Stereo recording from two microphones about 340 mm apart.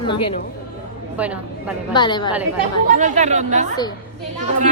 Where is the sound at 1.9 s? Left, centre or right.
Centre.